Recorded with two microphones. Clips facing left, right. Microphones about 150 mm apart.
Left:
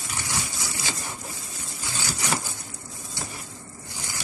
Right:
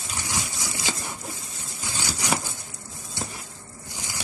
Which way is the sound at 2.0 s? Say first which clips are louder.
Right 2 dB; 15° right (ahead or behind).